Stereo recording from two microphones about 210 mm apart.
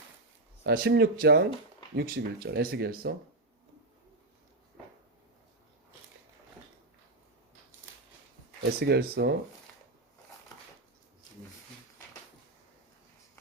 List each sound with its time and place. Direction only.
0.6 s speech: 50° right (ahead or behind)
8.8 s speech: 50° right (ahead or behind)